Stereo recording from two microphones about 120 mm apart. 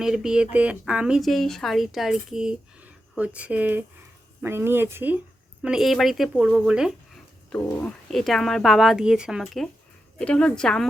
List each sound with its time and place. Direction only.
0.0 s speech: 5° right (ahead or behind)
5.6 s speech: 5° right (ahead or behind)
7.5 s a woman's voice: 10° left (ahead or behind)
8.0 s speech: centre (ahead or behind)
10.2 s a woman's voice: 5° left (ahead or behind)